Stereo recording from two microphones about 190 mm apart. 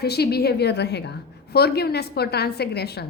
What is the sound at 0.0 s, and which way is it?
A woman's voice, 55° left (ahead or behind).